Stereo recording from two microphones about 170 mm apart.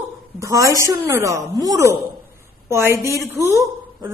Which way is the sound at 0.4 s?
20° right (ahead or behind).